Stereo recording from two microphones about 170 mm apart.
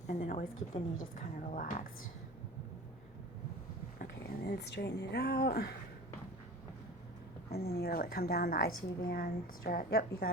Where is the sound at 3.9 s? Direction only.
75° left (ahead or behind).